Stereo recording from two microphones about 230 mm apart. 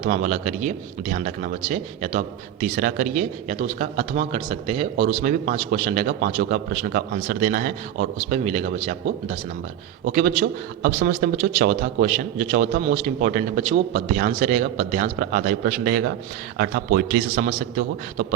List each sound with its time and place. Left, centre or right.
0.0 s a man's voice: right